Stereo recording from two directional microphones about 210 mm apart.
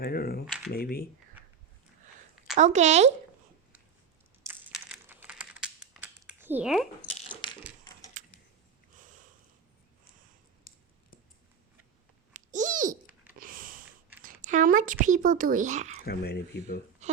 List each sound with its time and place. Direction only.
0.0 s speech: 45° left (ahead or behind)
0.4 s speech: 5° right (ahead or behind)
0.7 s speech: 45° left (ahead or behind)
2.6 s speech: 35° right (ahead or behind)
4.4 s computer keyboard: 5° right (ahead or behind)
7.1 s dog: 20° left (ahead or behind)
8.2 s a sound: 35° right (ahead or behind)
10.7 s a sound: 45° left (ahead or behind)
12.3 s a sound: 35° right (ahead or behind)
13.4 s sniff: 40° right (ahead or behind)
14.4 s speech: 40° right (ahead or behind)
16.0 s speech: 45° left (ahead or behind)
17.0 s a sound: 35° right (ahead or behind)